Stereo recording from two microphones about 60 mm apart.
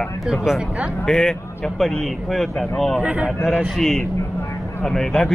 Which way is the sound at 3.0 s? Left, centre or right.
Right.